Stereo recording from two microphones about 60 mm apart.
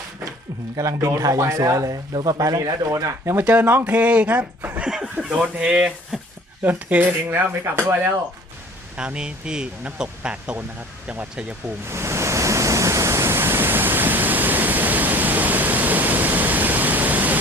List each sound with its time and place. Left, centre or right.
0.8 s speech: right
3.4 s speech: right
4.8 s snicker: centre
5.5 s speech: centre
6.6 s speech: right
9.0 s speech: centre
11.9 s pink noise: right